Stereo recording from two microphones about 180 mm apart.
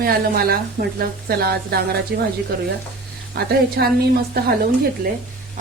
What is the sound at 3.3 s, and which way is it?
A woman's voice, 60° right (ahead or behind).